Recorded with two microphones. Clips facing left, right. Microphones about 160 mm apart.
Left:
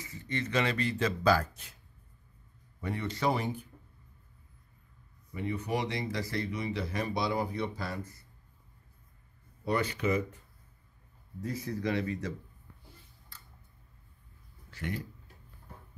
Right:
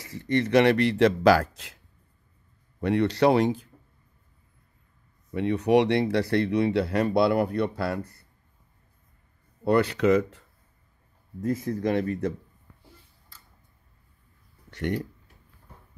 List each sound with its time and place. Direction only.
0.0 s speech: 75° right (ahead or behind)
2.8 s speech: 75° right (ahead or behind)
5.3 s speech: 75° right (ahead or behind)
9.7 s speech: 70° right (ahead or behind); by 10.4 s 85° right
11.4 s speech: 50° right (ahead or behind)
14.7 s speech: 70° right (ahead or behind)